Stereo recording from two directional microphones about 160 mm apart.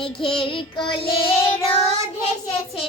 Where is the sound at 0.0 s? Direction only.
35° left (ahead or behind).